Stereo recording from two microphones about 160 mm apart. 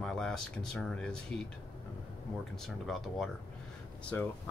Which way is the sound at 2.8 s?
Centre (ahead or behind).